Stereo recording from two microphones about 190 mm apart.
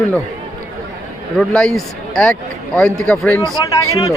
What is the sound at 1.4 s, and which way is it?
Speech, 5° left (ahead or behind).